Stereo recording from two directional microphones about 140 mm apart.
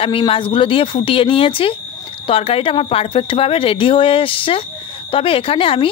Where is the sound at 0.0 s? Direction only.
40° left (ahead or behind).